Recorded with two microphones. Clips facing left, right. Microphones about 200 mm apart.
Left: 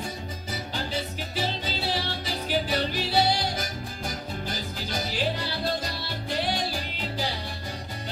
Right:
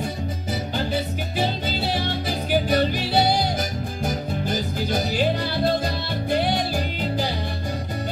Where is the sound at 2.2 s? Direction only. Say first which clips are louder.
Right 6 dB; 50° right (ahead or behind).